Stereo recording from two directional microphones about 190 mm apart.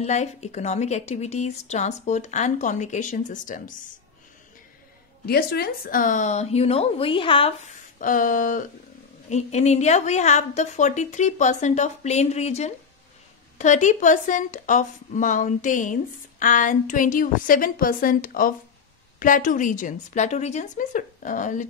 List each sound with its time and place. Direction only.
0.0 s a woman's voice: 35° left (ahead or behind)
5.2 s a woman's voice: 55° left (ahead or behind); by 7.7 s 30° left (ahead or behind)
8.0 s a woman's voice: 45° left (ahead or behind)